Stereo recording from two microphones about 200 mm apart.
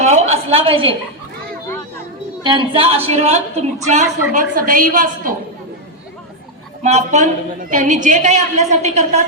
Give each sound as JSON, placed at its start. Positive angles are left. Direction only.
{"t": 0.0, "sound": "a sound", "side_deg": -35}
{"t": 2.4, "sound": "a woman's voice", "side_deg": -25}
{"t": 6.8, "sound": "a woman's voice", "side_deg": -35}